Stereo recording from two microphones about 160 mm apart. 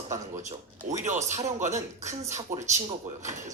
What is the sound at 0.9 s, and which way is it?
Speech, 50° right (ahead or behind).